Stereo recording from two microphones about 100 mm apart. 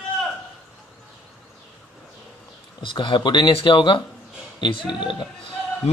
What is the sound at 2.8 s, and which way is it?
Speech, 55° left (ahead or behind).